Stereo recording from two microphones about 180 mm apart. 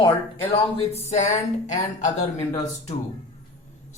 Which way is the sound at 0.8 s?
40° left (ahead or behind).